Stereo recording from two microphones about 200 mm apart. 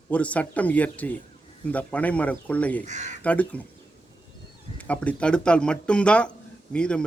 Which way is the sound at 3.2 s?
5° left (ahead or behind).